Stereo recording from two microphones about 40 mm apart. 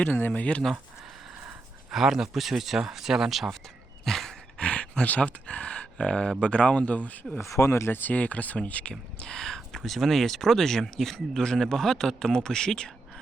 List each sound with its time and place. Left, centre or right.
0.0 s speech: left
1.9 s speech: centre
4.0 s dog: centre
4.5 s a sound: left
5.0 s speech: left
7.3 s speech: left
8.1 s speech: left
8.9 s speech: left